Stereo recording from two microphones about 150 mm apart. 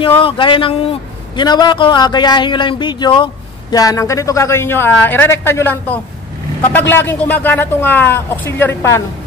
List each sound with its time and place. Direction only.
0.2 s a man's voice: 35° left (ahead or behind); by 9.0 s 15° left (ahead or behind)